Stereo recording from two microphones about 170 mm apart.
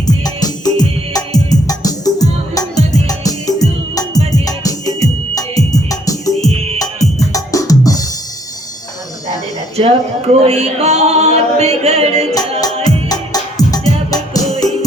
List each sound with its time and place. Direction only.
0.1 s music: 20° left (ahead or behind)
10.4 s a capella: 40° right (ahead or behind)
12.3 s music: 20° left (ahead or behind)